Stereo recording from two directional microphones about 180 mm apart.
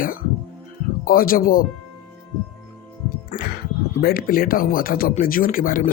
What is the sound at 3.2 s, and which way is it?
Speech, 50° left (ahead or behind).